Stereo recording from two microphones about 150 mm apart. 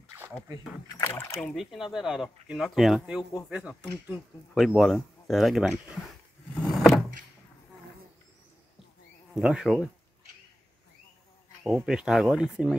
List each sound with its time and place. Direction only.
0.9 s speech: 15° left (ahead or behind)
1.5 s speech: centre (ahead or behind)
6.6 s a sound: centre (ahead or behind)
9.3 s speech: 5° right (ahead or behind)
11.6 s speech: 5° right (ahead or behind)